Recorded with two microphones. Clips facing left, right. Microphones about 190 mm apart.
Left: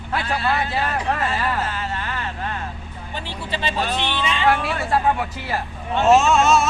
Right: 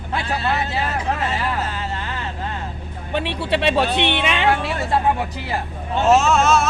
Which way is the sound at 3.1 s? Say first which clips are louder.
Right 8 dB; 65° right (ahead or behind).